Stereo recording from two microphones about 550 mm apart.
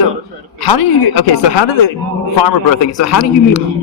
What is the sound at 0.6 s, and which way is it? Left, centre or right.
Speech, left.